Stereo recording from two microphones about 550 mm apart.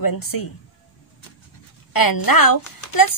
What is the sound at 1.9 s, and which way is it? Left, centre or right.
Speech, left.